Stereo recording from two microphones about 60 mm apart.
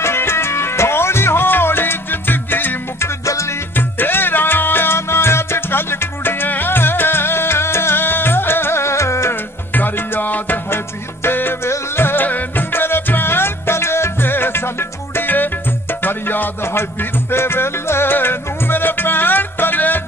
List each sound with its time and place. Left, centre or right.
0.0 s music: left
3.3 s music: left
3.7 s music: left
9.3 s music: left